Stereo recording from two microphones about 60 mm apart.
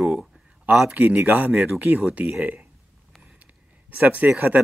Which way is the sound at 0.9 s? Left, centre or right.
Right.